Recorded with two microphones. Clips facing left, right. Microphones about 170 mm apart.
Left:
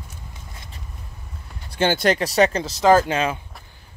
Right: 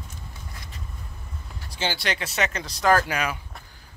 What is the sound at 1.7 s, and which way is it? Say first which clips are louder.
Speech: left 9 dB; 50° left (ahead or behind).